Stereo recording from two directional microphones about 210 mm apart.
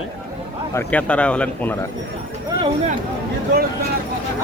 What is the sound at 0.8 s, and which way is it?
Speech, 5° left (ahead or behind).